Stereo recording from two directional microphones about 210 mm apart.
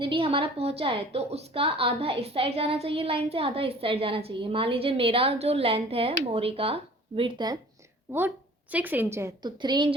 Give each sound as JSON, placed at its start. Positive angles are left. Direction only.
{"t": 0.0, "sound": "a woman's voice", "side_deg": -25}
{"t": 8.7, "sound": "a woman's voice", "side_deg": -10}